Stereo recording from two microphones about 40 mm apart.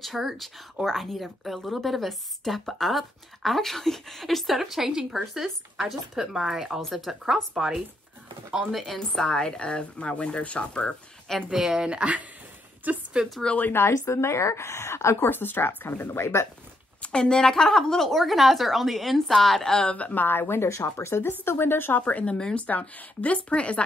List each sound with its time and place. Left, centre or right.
0.0 s a woman's voice: centre
8.7 s a woman's voice: centre
9.2 s speech: left
11.5 s speech: centre
12.9 s a woman's voice: right
13.5 s speech: left
14.1 s speech: left
16.1 s speech: left
17.0 s a woman's voice: left
19.9 s speech: left
20.2 s speech: left
21.9 s speech: left
22.7 s speech: left